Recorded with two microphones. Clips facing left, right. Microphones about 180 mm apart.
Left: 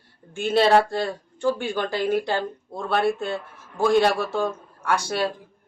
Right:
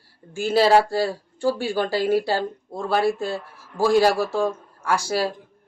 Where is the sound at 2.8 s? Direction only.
Centre (ahead or behind).